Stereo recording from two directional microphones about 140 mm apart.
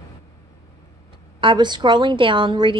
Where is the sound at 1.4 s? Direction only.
35° right (ahead or behind).